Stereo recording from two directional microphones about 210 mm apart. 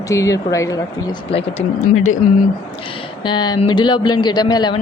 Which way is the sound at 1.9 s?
80° left.